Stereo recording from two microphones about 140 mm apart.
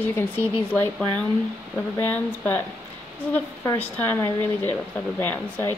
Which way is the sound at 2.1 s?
15° left (ahead or behind).